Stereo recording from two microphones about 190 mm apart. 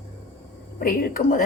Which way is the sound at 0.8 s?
50° left (ahead or behind).